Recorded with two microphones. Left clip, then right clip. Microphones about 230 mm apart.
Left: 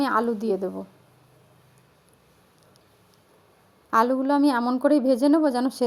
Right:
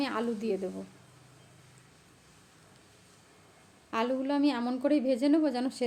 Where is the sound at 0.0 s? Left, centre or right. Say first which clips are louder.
Left 9 dB; left.